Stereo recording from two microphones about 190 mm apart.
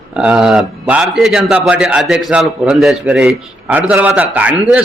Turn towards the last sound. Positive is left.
turn(degrees=-5)  # may be behind; listen again after turning